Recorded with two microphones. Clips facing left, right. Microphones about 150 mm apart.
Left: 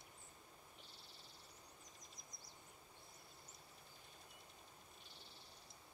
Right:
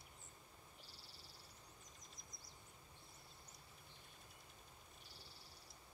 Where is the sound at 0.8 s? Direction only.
20° left (ahead or behind).